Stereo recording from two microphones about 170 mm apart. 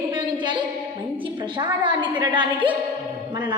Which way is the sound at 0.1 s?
25° right (ahead or behind).